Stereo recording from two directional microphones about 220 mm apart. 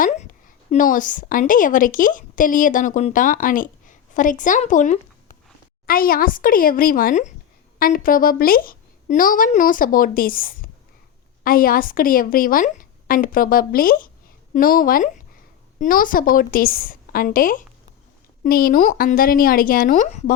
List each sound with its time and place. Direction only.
0.0 s a woman's voice: 40° left (ahead or behind)